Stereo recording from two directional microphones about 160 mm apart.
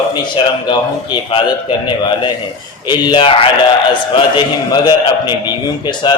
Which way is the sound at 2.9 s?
30° left (ahead or behind).